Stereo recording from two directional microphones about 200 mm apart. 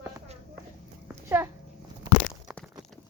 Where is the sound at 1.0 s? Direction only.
10° right (ahead or behind).